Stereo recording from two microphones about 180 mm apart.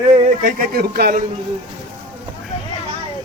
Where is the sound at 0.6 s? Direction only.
60° right (ahead or behind).